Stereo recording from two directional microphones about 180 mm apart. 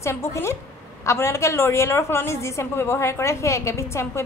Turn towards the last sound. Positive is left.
turn(degrees=15)  # may be behind; listen again after turning